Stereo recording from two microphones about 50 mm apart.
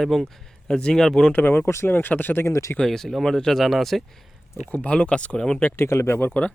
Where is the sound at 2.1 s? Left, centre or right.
Left.